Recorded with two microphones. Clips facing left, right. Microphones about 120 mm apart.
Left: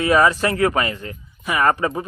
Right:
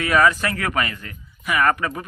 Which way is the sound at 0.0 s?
30° left (ahead or behind).